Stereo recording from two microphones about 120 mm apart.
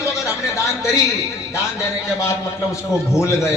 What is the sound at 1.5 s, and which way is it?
A man's voice, 25° left (ahead or behind).